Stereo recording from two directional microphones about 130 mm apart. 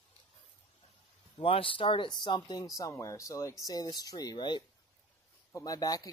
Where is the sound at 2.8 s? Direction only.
25° left (ahead or behind).